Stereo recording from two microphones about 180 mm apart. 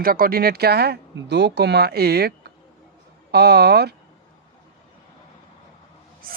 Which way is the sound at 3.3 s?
65° right (ahead or behind).